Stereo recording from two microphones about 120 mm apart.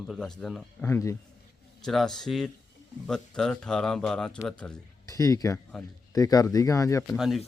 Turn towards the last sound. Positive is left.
turn(degrees=0)  # may be behind; listen again after turning